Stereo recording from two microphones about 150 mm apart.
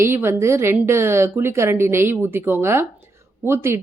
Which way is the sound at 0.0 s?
15° right (ahead or behind).